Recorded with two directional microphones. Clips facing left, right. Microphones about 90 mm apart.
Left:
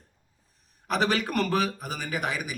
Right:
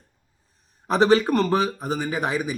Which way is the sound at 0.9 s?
30° right (ahead or behind).